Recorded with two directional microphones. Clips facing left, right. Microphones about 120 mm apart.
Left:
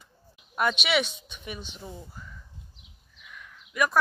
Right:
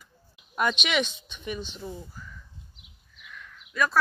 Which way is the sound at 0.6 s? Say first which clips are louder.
Left 1 dB; 5° left (ahead or behind).